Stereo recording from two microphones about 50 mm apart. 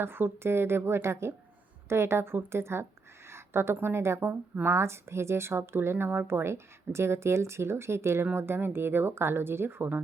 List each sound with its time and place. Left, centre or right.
0.0 s a woman's voice: right